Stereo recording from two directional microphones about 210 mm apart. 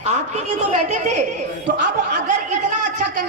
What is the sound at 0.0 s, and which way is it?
A woman's voice, 35° right (ahead or behind).